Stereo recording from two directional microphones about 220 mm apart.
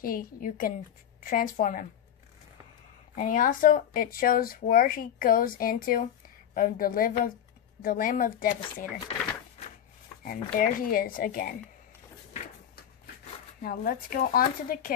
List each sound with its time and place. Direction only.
0.0 s speech: 40° left (ahead or behind)
3.2 s speech: 40° left (ahead or behind)
10.2 s speech: 40° left (ahead or behind)
13.6 s speech: 45° left (ahead or behind)